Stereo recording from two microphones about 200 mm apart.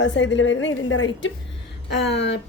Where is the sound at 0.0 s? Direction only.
65° left (ahead or behind).